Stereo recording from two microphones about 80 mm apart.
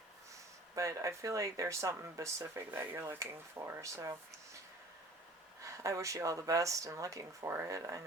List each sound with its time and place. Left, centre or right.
0.8 s speech: right
5.6 s speech: right